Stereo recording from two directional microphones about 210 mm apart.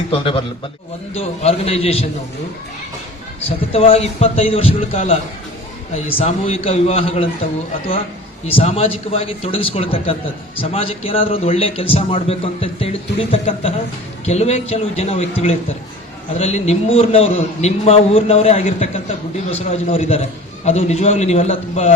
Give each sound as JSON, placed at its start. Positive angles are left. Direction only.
{"t": 0.1, "sound": "a man's voice", "side_deg": 25}
{"t": 3.7, "sound": "a man's voice", "side_deg": 30}
{"t": 8.4, "sound": "a man's voice", "side_deg": 25}
{"t": 16.4, "sound": "a man's voice", "side_deg": 30}